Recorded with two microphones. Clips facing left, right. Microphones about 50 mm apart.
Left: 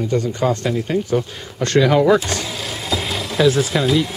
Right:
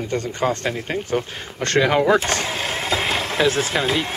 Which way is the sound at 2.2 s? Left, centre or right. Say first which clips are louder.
Right 2 dB; right.